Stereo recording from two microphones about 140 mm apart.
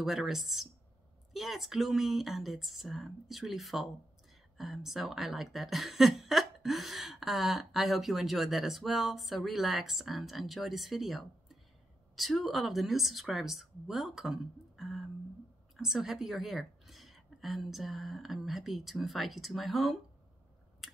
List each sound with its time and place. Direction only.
0.0 s a woman's voice: 5° right (ahead or behind)
20.8 s chewing: centre (ahead or behind)